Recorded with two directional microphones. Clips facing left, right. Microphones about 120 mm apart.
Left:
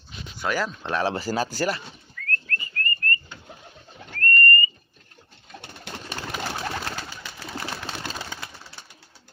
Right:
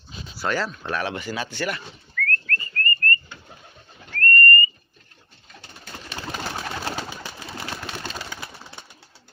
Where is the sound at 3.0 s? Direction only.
15° left (ahead or behind).